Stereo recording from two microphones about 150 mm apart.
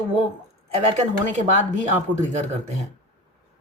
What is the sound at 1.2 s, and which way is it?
Speech, 55° right (ahead or behind).